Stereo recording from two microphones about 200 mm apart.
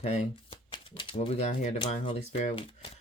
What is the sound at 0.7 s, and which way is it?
Speech, 25° left (ahead or behind).